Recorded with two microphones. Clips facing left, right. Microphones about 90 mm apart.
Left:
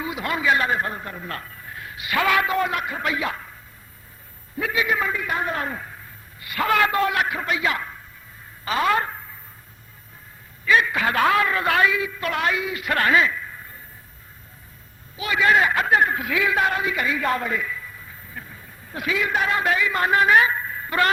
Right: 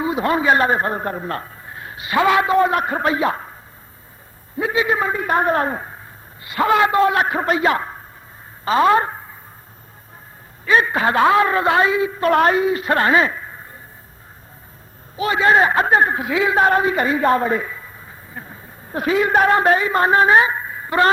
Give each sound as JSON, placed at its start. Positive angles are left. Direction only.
{"t": 0.0, "sound": "a man's voice", "side_deg": -30}
{"t": 4.5, "sound": "a man's voice", "side_deg": -25}
{"t": 6.4, "sound": "a man's voice", "side_deg": -25}
{"t": 10.7, "sound": "a man's voice", "side_deg": -35}
{"t": 15.1, "sound": "a man's voice", "side_deg": -35}